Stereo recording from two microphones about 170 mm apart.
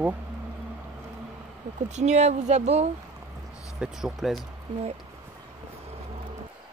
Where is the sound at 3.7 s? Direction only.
Centre (ahead or behind).